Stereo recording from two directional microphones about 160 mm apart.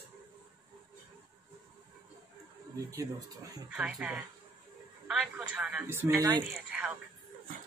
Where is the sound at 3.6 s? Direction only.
5° right (ahead or behind); by 6.4 s 20° right (ahead or behind).